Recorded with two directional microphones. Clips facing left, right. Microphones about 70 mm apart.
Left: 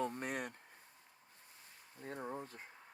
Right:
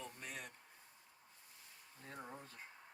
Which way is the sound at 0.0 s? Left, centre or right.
Left.